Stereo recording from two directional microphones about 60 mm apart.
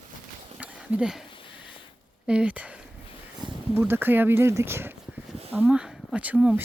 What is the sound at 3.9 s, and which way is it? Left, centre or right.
Speech, right.